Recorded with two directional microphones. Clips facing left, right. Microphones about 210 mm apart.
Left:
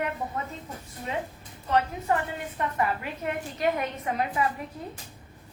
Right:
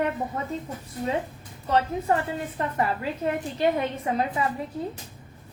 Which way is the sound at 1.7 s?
30° right (ahead or behind).